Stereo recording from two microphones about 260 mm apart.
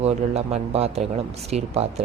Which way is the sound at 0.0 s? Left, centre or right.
Right.